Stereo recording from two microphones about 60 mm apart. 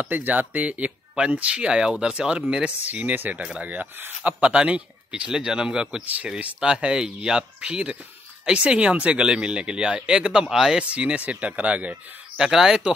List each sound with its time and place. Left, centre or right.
0.0 s speech: right
2.9 s speech: right; by 10.8 s centre
10.8 s speech: centre
12.4 s speech: centre